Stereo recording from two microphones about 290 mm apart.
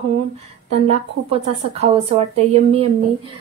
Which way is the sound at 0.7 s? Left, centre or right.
Right.